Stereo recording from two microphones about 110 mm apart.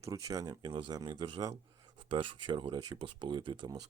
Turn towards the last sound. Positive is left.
turn(degrees=-45)  # may be behind; listen again after turning